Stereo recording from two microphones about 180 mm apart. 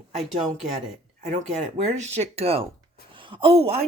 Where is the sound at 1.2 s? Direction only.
40° right (ahead or behind).